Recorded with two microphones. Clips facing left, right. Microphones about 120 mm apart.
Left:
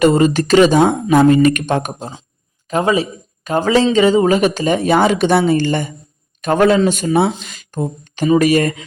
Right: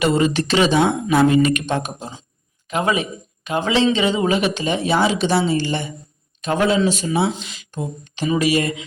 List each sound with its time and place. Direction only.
0.0 s speech: 40° left (ahead or behind)
2.6 s speech: 35° left (ahead or behind)